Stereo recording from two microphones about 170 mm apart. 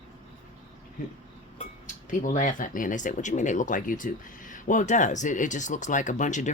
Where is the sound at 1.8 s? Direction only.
50° left (ahead or behind).